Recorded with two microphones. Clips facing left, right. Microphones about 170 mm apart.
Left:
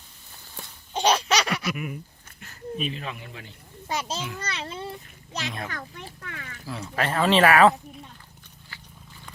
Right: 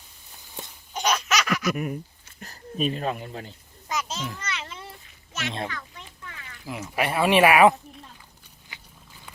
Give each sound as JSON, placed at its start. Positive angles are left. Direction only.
{"t": 0.9, "sound": "laughter", "side_deg": 30}
{"t": 1.7, "sound": "speech", "side_deg": -40}
{"t": 3.8, "sound": "children playing", "side_deg": 30}
{"t": 4.4, "sound": "a sound", "side_deg": 30}
{"t": 5.6, "sound": "a child's voice", "side_deg": 50}
{"t": 6.2, "sound": "a sound", "side_deg": 55}
{"t": 6.9, "sound": "speech", "side_deg": -10}
{"t": 8.7, "sound": "walk", "side_deg": -20}